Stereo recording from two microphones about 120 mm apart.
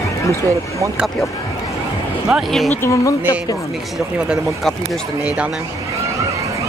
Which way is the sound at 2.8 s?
25° left (ahead or behind).